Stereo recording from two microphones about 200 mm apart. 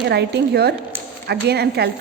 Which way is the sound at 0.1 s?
55° right (ahead or behind).